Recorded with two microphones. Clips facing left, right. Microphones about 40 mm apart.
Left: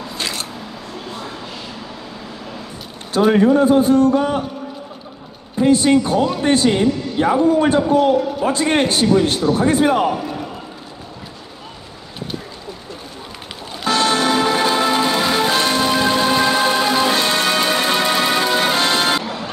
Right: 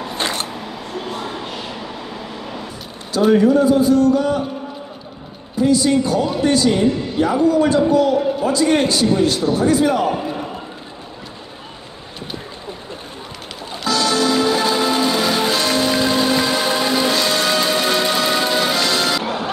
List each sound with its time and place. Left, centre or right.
0.1 s camera: right
3.3 s a man's voice: left
5.6 s a man's voice: left
10.2 s a sound: centre
13.8 s music: left